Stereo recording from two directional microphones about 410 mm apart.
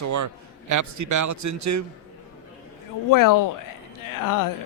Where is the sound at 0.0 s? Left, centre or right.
Right.